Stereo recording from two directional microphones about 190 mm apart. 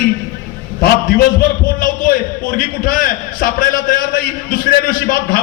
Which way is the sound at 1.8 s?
45° left (ahead or behind).